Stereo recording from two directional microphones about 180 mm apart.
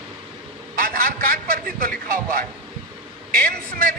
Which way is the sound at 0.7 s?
50° right (ahead or behind).